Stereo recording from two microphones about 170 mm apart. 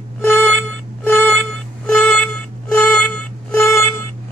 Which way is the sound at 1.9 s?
5° left (ahead or behind).